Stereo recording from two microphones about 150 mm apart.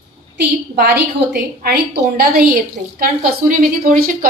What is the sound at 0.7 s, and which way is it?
A woman's voice, 90° right.